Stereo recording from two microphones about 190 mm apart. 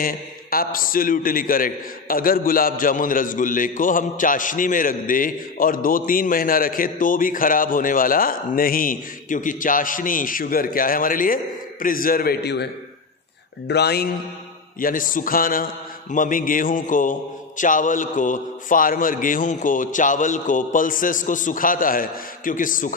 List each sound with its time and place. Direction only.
0.0 s a man's voice: 50° left (ahead or behind)
13.7 s a man's voice: 60° left (ahead or behind)
14.8 s a man's voice: 45° left (ahead or behind)